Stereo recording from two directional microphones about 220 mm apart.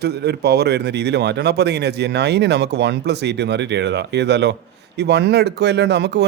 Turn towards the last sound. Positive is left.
turn(degrees=-50)  # may be behind; listen again after turning